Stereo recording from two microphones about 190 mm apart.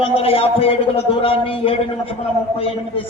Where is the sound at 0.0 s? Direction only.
30° left (ahead or behind).